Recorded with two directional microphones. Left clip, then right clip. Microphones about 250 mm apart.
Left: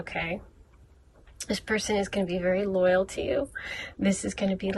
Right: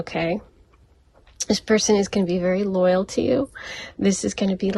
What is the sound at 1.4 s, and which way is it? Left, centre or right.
Speech, centre.